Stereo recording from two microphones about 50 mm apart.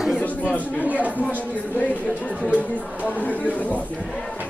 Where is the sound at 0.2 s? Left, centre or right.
Left.